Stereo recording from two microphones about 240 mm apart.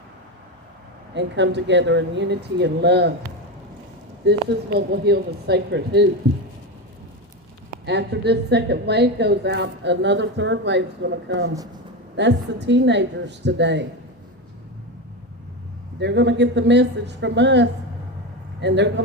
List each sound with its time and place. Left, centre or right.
1.1 s a woman's voice: right
4.3 s a woman's voice: right
7.9 s a woman's voice: right
16.0 s a woman's voice: right